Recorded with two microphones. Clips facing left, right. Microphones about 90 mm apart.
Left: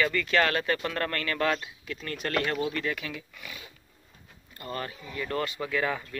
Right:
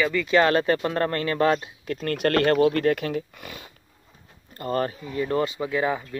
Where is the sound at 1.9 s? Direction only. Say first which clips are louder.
Right 8 dB; 55° right (ahead or behind).